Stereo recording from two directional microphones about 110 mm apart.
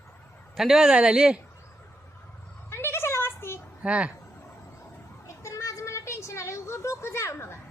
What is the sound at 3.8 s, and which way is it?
Speech, 10° right (ahead or behind).